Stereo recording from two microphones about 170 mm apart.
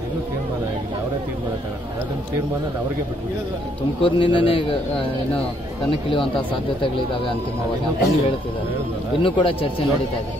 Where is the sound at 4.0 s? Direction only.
30° left (ahead or behind).